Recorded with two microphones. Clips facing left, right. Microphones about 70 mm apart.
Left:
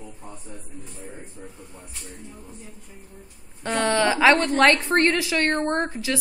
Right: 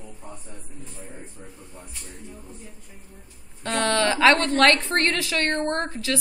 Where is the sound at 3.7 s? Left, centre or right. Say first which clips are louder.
Left 1 dB; centre.